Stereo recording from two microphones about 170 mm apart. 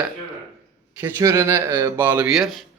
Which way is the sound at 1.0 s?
15° right (ahead or behind).